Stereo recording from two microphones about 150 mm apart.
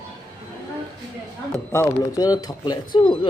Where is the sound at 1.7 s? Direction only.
20° left (ahead or behind).